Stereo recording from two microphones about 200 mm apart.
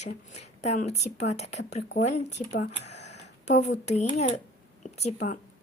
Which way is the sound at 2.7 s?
35° left (ahead or behind).